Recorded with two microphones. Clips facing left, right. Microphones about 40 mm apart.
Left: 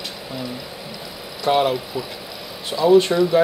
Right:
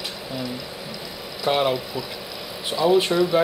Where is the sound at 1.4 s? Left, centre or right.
Centre.